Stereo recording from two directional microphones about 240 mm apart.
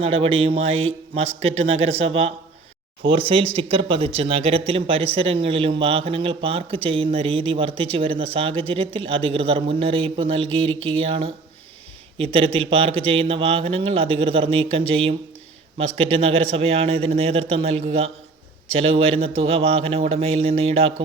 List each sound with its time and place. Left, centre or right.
0.0 s a man's voice: right